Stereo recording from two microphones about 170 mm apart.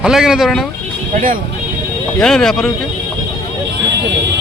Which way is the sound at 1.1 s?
55° right (ahead or behind).